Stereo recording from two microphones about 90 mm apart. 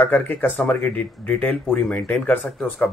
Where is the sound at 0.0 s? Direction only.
20° left (ahead or behind).